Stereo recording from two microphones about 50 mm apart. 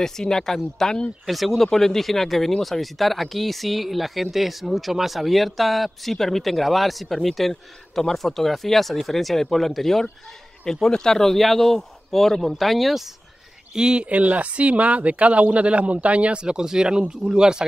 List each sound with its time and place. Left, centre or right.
0.0 s speech: centre
1.2 s speech: centre
13.7 s speech: centre
14.0 s speech: right